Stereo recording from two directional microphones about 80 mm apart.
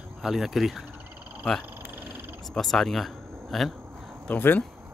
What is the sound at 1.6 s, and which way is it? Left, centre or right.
Frog, right.